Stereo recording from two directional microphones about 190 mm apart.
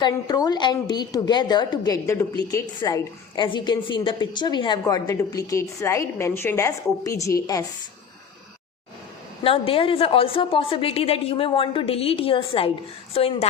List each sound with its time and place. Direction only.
0.0 s a woman's voice: 20° left (ahead or behind)
9.4 s a woman's voice: 30° left (ahead or behind)